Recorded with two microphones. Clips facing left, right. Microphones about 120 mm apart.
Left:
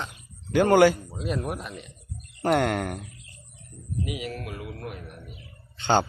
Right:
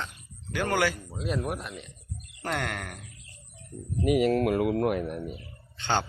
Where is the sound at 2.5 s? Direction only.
25° left (ahead or behind).